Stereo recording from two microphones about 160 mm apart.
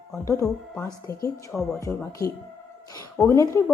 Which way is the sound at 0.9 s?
20° left (ahead or behind).